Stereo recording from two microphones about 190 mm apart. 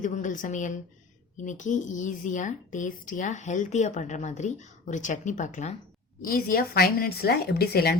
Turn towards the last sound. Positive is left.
turn(degrees=55)  # may be behind; listen again after turning